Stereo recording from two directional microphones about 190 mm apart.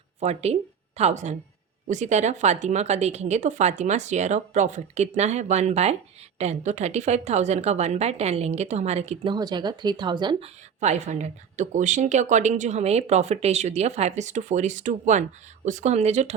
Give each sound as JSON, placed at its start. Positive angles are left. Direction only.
{"t": 0.2, "sound": "speech", "side_deg": -35}
{"t": 9.3, "sound": "speech", "side_deg": -20}
{"t": 10.8, "sound": "speech", "side_deg": -35}